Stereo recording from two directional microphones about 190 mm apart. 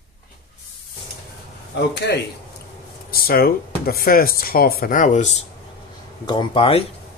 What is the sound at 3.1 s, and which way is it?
Speech, 50° left (ahead or behind).